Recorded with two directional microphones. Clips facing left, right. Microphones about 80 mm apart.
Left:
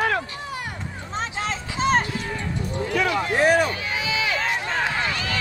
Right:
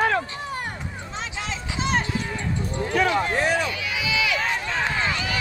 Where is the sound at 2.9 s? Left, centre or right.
Right.